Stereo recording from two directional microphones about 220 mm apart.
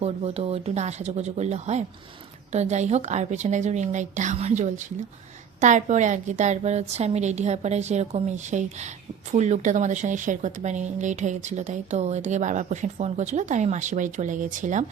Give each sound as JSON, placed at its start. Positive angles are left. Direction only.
{"t": 0.0, "sound": "a woman's voice", "side_deg": -30}